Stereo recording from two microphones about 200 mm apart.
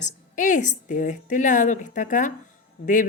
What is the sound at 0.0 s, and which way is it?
A woman's voice, 40° left (ahead or behind).